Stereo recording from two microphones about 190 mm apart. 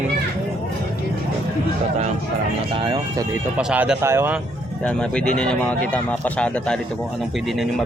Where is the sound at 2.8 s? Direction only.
20° right (ahead or behind).